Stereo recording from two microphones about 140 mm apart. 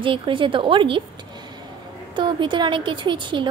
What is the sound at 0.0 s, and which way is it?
A woman's voice, 35° right (ahead or behind).